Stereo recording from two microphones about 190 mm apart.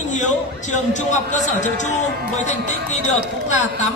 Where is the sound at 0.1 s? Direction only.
40° left (ahead or behind).